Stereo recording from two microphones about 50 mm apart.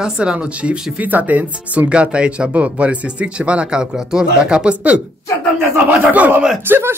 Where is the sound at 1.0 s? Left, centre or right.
Right.